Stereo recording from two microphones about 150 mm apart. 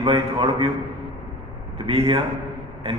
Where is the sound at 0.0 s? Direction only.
35° right (ahead or behind).